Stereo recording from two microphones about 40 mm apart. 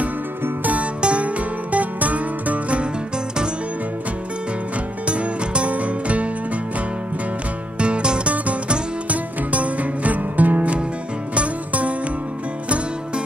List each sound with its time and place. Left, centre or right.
1.0 s music: right
5.0 s music: right
7.8 s music: right